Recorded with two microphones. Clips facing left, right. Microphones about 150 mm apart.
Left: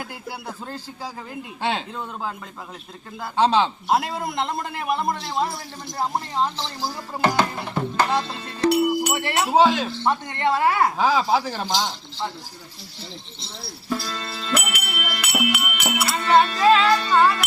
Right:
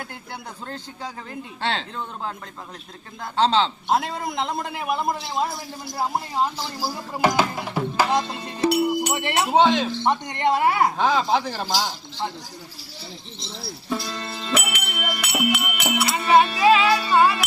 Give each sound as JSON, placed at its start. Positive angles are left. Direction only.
{"t": 0.0, "sound": "speech", "side_deg": 5}
{"t": 3.3, "sound": "a man's voice", "side_deg": 10}
{"t": 9.5, "sound": "a man's voice", "side_deg": 5}
{"t": 9.9, "sound": "speech", "side_deg": -15}
{"t": 10.9, "sound": "a man's voice", "side_deg": 5}
{"t": 13.4, "sound": "a man's voice", "side_deg": 0}
{"t": 14.0, "sound": "speech", "side_deg": -20}
{"t": 14.5, "sound": "music", "side_deg": 5}
{"t": 16.0, "sound": "speech", "side_deg": -15}